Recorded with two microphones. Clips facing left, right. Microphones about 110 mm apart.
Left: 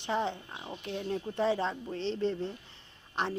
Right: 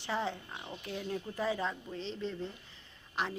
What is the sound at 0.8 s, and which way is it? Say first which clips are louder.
Speech: left 4 dB; 30° left (ahead or behind).